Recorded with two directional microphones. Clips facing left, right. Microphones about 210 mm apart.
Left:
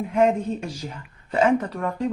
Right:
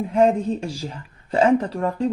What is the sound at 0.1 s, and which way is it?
Speech, 30° right (ahead or behind).